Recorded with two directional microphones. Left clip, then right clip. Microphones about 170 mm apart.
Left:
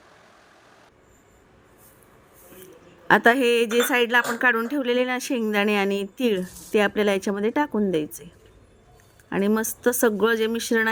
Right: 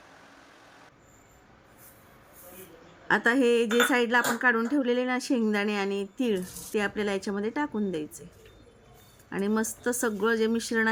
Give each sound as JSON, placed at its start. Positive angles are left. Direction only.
{"t": 3.1, "sound": "speech", "side_deg": 30}
{"t": 9.3, "sound": "speech", "side_deg": 25}